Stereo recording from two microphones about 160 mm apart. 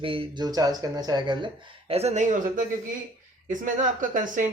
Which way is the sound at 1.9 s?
40° right (ahead or behind).